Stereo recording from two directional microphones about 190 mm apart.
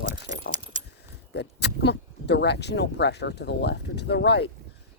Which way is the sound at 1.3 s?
65° left (ahead or behind).